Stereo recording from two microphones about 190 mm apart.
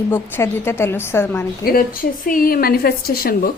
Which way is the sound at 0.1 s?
10° left (ahead or behind).